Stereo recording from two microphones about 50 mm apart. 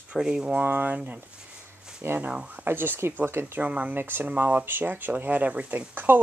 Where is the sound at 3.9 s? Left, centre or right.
Right.